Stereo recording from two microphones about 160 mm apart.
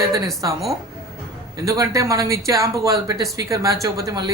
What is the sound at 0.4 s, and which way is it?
Speech, 25° right (ahead or behind).